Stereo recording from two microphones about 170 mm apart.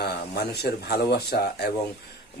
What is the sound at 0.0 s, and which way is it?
Speech, 70° left (ahead or behind).